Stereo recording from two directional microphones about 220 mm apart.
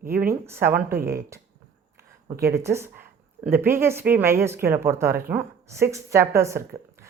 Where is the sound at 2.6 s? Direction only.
10° right (ahead or behind).